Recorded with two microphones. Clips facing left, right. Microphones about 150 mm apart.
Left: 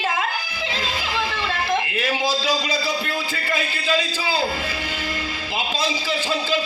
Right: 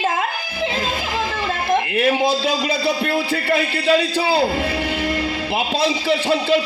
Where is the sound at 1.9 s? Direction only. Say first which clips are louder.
Right 6 dB; 55° right (ahead or behind).